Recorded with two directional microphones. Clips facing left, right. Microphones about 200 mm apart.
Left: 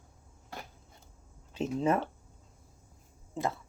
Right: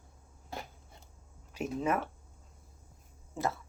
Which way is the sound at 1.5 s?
25° left (ahead or behind).